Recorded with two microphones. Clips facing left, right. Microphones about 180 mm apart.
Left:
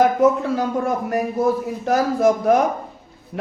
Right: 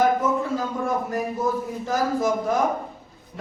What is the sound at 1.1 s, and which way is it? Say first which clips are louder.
Speech: left 5 dB; 70° left (ahead or behind).